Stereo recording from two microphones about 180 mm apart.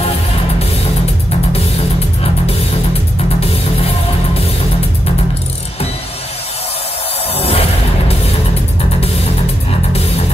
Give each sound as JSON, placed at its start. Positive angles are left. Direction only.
{"t": 3.3, "sound": "music", "side_deg": 35}
{"t": 7.3, "sound": "music", "side_deg": 35}
{"t": 9.7, "sound": "music", "side_deg": 35}